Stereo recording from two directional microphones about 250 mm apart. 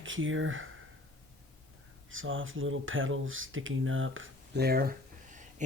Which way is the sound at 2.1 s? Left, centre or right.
Right.